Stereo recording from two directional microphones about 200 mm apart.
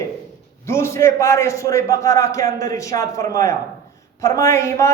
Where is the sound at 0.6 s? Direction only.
15° left (ahead or behind).